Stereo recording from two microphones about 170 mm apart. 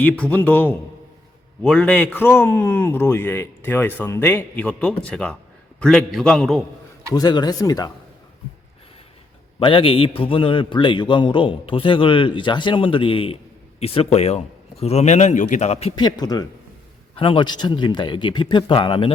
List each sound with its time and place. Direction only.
0.0 s a man's voice: 10° left (ahead or behind)
7.1 s speech: 25° left (ahead or behind)
9.6 s a man's voice: 30° left (ahead or behind)
16.0 s speech: 25° left (ahead or behind)